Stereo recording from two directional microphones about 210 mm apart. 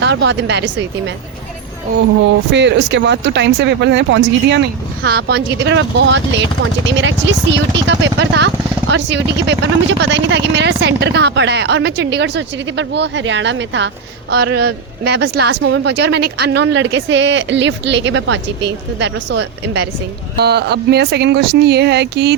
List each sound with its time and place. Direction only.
0.0 s speech: 55° right (ahead or behind)
2.5 s speech: 55° right (ahead or behind)